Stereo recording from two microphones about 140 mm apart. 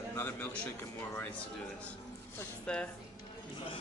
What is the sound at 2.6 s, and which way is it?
Speech, 10° left (ahead or behind).